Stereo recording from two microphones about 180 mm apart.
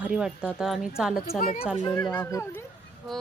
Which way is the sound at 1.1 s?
55° left (ahead or behind).